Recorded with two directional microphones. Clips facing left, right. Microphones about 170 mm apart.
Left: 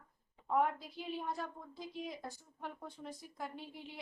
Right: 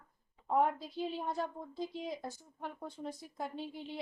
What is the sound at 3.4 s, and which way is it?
Speech, 30° right (ahead or behind).